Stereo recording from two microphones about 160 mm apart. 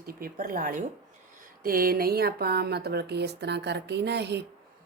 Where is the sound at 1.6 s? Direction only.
65° right (ahead or behind).